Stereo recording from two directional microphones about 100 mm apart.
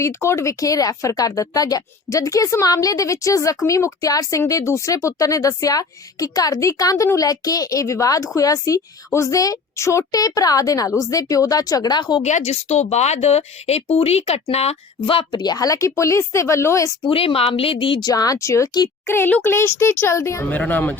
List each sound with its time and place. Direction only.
0.0 s speech: 30° left (ahead or behind); by 12.2 s 45° left (ahead or behind)
12.4 s speech: 90° left; by 16.9 s 30° left (ahead or behind)
17.1 s speech: 70° left (ahead or behind)
18.0 s a child's voice: 40° left (ahead or behind)
20.5 s speech: 15° left (ahead or behind)